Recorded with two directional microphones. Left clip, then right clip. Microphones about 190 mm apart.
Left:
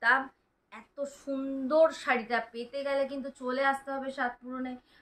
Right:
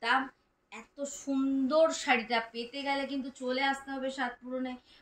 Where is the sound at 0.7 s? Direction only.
25° left (ahead or behind).